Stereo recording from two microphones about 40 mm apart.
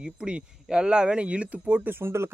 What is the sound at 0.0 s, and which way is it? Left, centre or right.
Speech, right.